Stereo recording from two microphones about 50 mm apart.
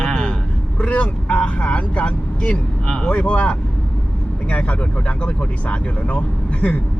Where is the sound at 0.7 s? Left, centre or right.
Left.